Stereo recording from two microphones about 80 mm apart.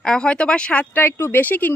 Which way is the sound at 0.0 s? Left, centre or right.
Centre.